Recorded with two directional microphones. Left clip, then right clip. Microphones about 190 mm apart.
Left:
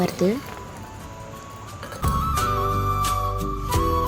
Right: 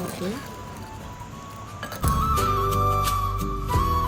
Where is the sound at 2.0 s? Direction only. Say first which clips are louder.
Even; centre (ahead or behind).